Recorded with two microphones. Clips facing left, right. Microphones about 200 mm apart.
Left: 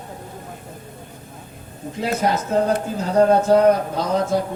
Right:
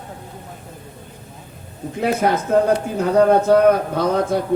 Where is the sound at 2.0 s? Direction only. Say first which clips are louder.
Right 3 dB; 60° right (ahead or behind).